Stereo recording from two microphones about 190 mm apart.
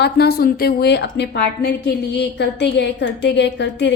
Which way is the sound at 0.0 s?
55° left (ahead or behind).